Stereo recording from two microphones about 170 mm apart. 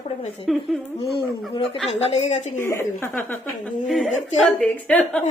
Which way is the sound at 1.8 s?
40° left (ahead or behind).